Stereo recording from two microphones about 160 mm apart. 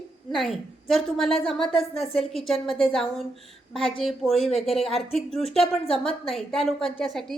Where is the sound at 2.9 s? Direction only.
Centre (ahead or behind).